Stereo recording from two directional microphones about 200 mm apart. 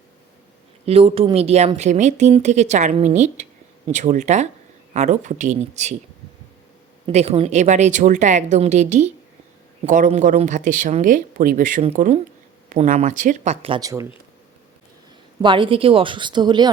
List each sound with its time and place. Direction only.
0.9 s speech: 30° right (ahead or behind)
7.1 s speech: 30° right (ahead or behind)
15.4 s speech: 25° right (ahead or behind)